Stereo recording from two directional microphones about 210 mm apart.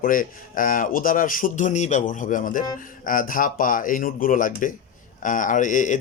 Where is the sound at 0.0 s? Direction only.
40° left (ahead or behind).